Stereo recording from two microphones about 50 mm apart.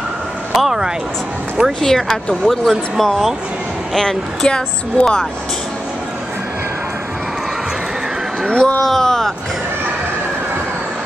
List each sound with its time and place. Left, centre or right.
0.6 s speech: centre
1.8 s a woman's voice: centre
8.5 s speech: centre
8.8 s speech: centre